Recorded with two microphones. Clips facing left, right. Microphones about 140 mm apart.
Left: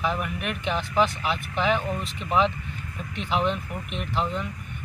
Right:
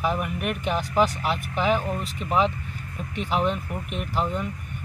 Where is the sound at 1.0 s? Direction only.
40° right (ahead or behind).